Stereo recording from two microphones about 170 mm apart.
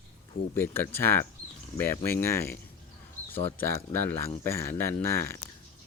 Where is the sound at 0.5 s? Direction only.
15° left (ahead or behind).